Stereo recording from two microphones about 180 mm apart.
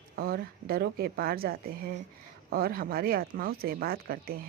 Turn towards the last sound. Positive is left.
turn(degrees=-55)  # may be behind; listen again after turning